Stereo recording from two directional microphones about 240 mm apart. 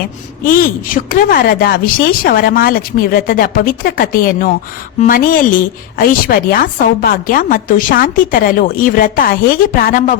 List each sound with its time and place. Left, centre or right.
0.4 s a woman's voice: left